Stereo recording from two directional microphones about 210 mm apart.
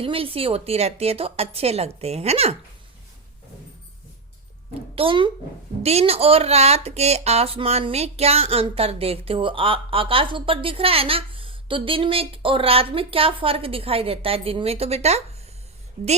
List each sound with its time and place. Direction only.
0.0 s speech: 25° right (ahead or behind)
4.9 s speech: 25° right (ahead or behind)